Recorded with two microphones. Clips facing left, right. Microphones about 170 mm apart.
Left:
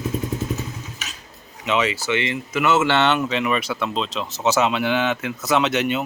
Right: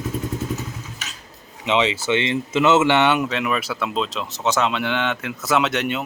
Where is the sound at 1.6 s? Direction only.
20° right (ahead or behind).